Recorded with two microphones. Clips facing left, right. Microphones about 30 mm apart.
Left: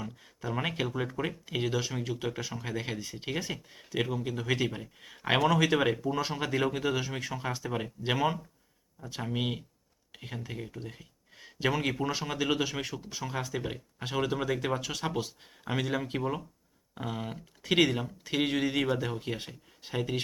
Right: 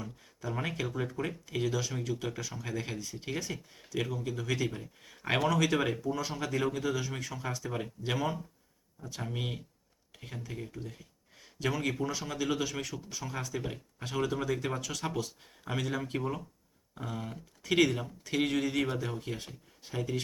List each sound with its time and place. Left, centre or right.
0.0 s speech: left
16.9 s speech: left